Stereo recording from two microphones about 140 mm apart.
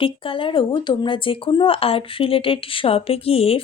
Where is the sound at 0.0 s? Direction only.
40° left (ahead or behind).